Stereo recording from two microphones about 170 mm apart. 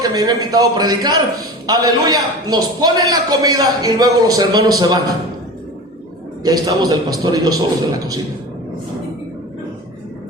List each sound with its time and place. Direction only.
0.0 s a man's voice: 25° right (ahead or behind)
6.4 s a man's voice: 25° right (ahead or behind)